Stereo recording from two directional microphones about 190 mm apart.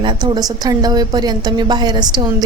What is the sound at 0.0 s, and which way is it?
A woman's voice, 25° right (ahead or behind).